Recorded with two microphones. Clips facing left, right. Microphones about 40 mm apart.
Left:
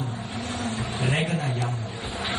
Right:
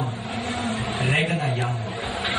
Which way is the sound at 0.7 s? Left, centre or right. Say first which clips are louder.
Right 2 dB; right.